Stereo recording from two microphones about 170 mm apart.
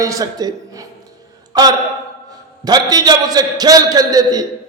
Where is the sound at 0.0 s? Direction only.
20° right (ahead or behind).